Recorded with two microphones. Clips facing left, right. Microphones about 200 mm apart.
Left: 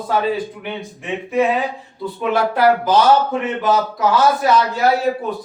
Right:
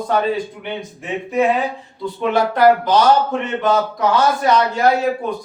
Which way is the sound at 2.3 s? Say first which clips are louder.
Right 2 dB; 5° left (ahead or behind).